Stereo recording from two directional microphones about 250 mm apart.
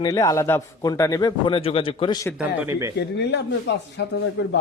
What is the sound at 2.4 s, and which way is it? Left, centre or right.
Speech, centre.